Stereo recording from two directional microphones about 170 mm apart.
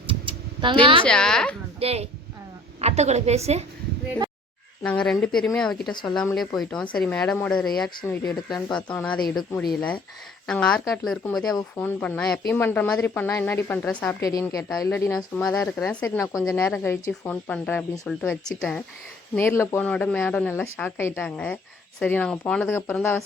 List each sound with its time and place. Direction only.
0.1 s a sound: 30° right (ahead or behind)
1.0 s speech: 5° left (ahead or behind)
1.8 s a woman's voice: 35° right (ahead or behind)
4.8 s speech: 5° left (ahead or behind)
5.9 s speech: 25° left (ahead or behind)
6.6 s speech: 5° left (ahead or behind)
8.4 s speech: 5° left (ahead or behind)